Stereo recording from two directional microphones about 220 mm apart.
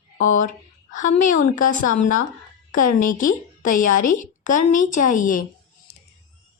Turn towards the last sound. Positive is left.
turn(degrees=35)  # may be behind; listen again after turning